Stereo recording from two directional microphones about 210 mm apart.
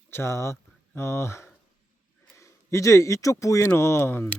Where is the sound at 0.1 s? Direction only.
10° left (ahead or behind).